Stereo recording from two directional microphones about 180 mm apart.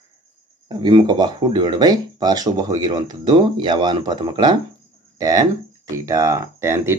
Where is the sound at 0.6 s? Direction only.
25° right (ahead or behind).